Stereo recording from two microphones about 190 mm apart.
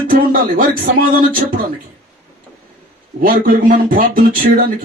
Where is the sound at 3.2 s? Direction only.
45° right (ahead or behind).